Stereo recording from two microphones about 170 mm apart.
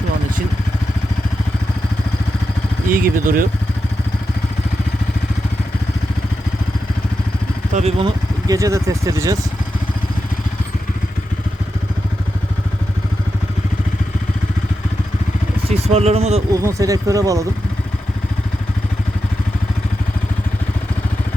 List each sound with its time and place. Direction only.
2.9 s speech: 55° right (ahead or behind)
7.7 s speech: 40° right (ahead or behind)
8.4 s speech: 20° right (ahead or behind)
15.6 s speech: 35° right (ahead or behind)
16.6 s speech: 20° right (ahead or behind)